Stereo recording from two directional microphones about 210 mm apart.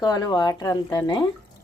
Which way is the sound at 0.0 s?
20° left (ahead or behind).